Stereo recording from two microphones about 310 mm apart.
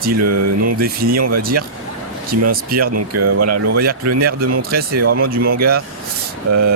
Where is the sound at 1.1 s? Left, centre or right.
Right.